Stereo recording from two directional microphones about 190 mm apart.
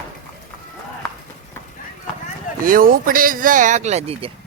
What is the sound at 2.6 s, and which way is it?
Speech, 50° right (ahead or behind).